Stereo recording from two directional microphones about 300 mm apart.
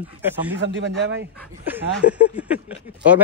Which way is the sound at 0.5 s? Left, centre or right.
Right.